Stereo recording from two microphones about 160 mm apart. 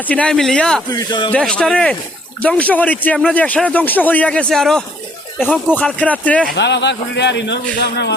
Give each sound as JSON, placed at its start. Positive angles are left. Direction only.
{"t": 0.0, "sound": "speech", "side_deg": 10}
{"t": 0.9, "sound": "speech", "side_deg": 25}
{"t": 1.3, "sound": "speech", "side_deg": 5}
{"t": 6.6, "sound": "a man's voice", "side_deg": 90}